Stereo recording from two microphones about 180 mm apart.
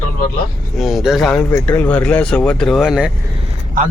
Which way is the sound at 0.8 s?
Centre (ahead or behind).